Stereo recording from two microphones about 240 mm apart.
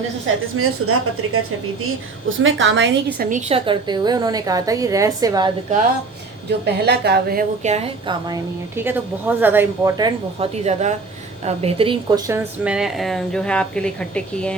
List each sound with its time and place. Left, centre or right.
0.5 s a woman's voice: right
2.4 s a woman's voice: right
3.2 s a woman's voice: right
3.7 s a woman's voice: centre
6.8 s a woman's voice: right
8.3 s a woman's voice: centre
10.4 s a woman's voice: right
12.3 s speech: centre